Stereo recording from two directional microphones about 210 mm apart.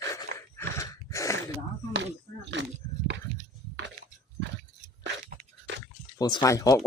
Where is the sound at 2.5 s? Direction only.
55° right (ahead or behind).